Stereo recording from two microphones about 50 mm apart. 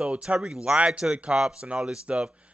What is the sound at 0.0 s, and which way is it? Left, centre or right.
Speech, centre.